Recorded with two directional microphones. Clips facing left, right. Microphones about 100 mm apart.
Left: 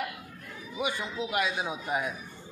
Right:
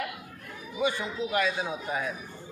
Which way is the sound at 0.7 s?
15° left (ahead or behind).